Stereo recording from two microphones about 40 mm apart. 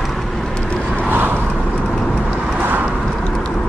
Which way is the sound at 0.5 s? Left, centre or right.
Left.